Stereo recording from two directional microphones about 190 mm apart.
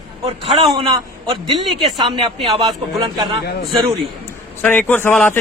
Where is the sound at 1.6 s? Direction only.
Centre (ahead or behind).